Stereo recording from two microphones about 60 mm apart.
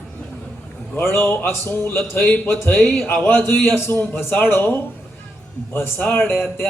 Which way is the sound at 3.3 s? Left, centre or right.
Left.